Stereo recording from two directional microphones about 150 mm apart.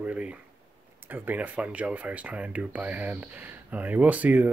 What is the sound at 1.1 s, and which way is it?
Speech, 10° right (ahead or behind).